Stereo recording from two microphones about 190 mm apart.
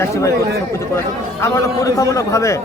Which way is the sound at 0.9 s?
15° left (ahead or behind).